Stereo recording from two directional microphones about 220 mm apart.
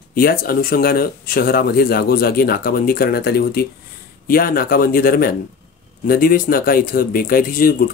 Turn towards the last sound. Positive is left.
turn(degrees=40)  # may be behind; listen again after turning